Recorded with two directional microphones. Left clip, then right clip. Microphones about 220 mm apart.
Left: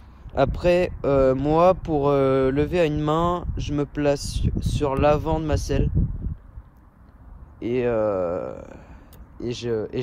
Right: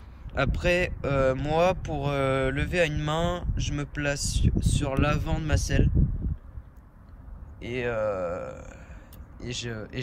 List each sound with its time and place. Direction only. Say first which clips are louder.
0.3 s speech: left 6 dB; 20° left (ahead or behind)
7.5 s speech: left 7 dB; 20° left (ahead or behind)